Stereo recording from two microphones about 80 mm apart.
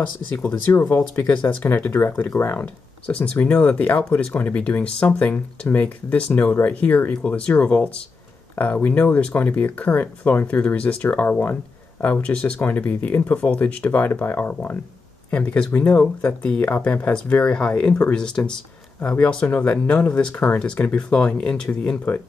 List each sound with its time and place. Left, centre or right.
0.7 s speech: left